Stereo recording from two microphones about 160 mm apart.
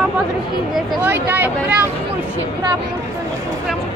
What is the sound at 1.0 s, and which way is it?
Speech, 15° right (ahead or behind).